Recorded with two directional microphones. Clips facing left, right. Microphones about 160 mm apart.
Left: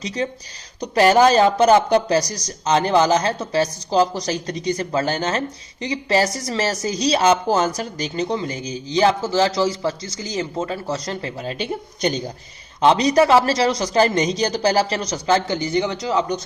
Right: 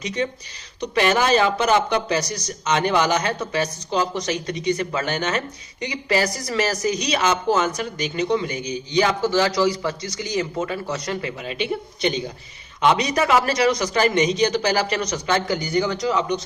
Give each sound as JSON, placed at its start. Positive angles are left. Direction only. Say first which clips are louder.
{"t": 0.0, "sound": "a man's voice", "louder": "even", "side_deg": 35}